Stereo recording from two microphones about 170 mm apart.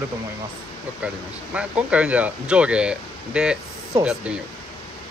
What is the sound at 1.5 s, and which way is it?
Speech, 5° right (ahead or behind).